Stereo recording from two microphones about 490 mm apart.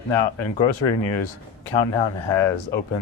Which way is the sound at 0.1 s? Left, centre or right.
Left.